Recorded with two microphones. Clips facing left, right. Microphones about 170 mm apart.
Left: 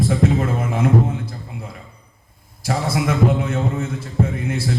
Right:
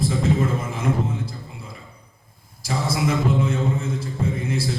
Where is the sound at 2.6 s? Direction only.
60° left (ahead or behind).